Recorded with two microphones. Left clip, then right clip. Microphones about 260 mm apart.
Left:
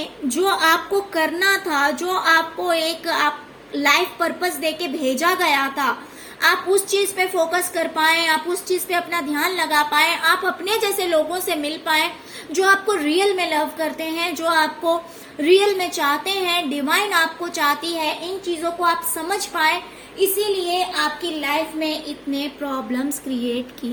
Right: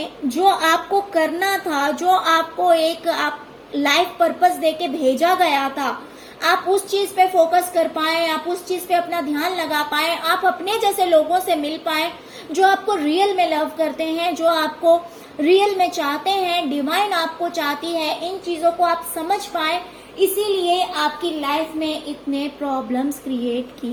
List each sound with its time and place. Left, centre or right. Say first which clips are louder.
0.0 s a woman's voice: right 4 dB; centre
12.5 s a woman's voice: right 1 dB; left
12.9 s a woman's voice: right 1 dB; centre
23.3 s a woman's voice: even; centre